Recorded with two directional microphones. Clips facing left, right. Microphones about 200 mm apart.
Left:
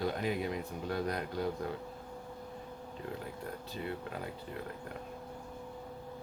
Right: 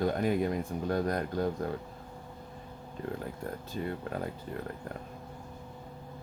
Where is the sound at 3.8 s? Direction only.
45° right (ahead or behind).